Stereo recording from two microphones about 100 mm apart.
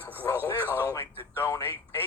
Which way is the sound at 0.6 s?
20° right (ahead or behind).